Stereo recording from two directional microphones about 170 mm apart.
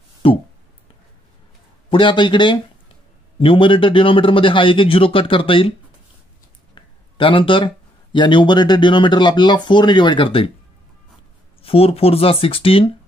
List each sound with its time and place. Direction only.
0.2 s a sound: 35° left (ahead or behind)
1.9 s a man's voice: 30° left (ahead or behind)
6.7 s speech: 30° left (ahead or behind)
11.6 s a man's voice: 35° left (ahead or behind)